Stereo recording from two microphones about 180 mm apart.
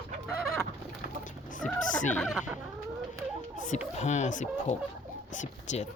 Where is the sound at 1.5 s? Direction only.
45° left (ahead or behind).